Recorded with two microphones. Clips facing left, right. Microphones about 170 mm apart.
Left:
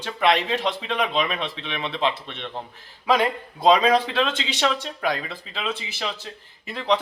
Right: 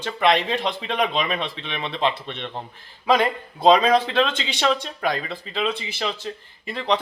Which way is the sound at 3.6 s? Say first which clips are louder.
Right 1 dB; 10° left (ahead or behind).